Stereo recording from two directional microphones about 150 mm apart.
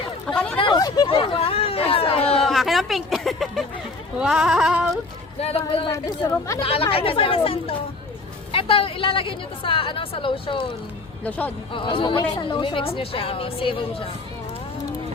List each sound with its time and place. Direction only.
0.3 s hubbub: 5° left (ahead or behind)
0.5 s hubbub: 30° left (ahead or behind)
1.0 s speech: 35° left (ahead or behind)
2.3 s a sound: centre (ahead or behind)
4.2 s yodeling: 5° right (ahead or behind)
5.4 s a woman's voice: 40° left (ahead or behind)
11.3 s a man's voice: 10° left (ahead or behind)
11.7 s a woman's voice: 35° left (ahead or behind)